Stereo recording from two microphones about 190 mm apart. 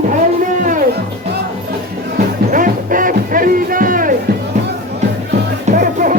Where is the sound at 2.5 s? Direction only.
45° right (ahead or behind).